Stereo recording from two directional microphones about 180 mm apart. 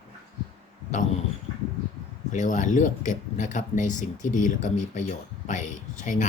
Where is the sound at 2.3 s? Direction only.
45° left (ahead or behind).